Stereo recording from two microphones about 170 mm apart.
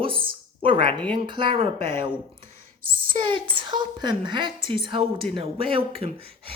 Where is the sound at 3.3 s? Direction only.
30° right (ahead or behind).